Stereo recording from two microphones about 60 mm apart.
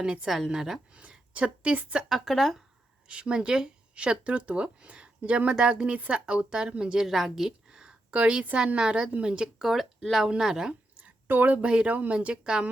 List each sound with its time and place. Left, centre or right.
0.0 s speech: centre
0.3 s speech: centre
0.9 s a woman's voice: centre
2.0 s speech: centre
3.1 s speech: centre
9.6 s speech: centre
11.0 s a sound: right
11.7 s speech: right